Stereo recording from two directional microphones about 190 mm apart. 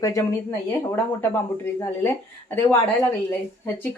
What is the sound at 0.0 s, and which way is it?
Speech, 15° left (ahead or behind).